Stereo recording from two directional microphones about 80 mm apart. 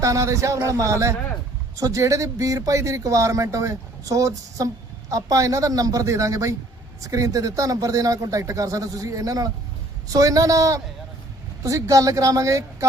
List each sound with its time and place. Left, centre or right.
0.0 s speech: right